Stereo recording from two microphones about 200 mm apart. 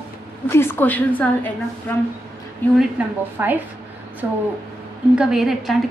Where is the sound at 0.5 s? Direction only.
10° left (ahead or behind).